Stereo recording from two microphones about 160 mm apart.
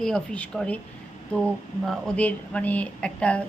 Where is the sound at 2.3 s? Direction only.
10° left (ahead or behind).